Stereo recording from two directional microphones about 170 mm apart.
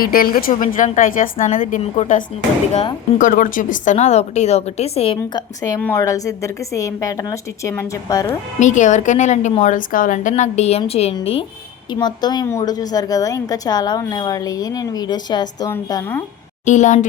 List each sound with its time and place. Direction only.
0.0 s a woman's voice: 60° left (ahead or behind); by 5.4 s 35° left (ahead or behind)
6.0 s a woman's voice: 20° left (ahead or behind)
8.5 s a woman's voice: 45° left (ahead or behind); by 16.1 s 20° left (ahead or behind)
16.6 s a woman's voice: 45° left (ahead or behind)